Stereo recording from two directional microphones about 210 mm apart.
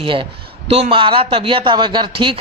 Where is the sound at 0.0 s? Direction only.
25° right (ahead or behind).